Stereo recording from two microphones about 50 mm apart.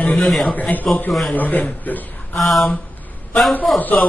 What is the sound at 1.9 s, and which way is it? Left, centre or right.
Speech, left.